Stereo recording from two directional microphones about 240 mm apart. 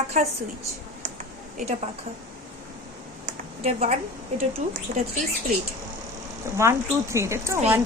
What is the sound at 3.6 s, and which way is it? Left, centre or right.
A woman's voice, right.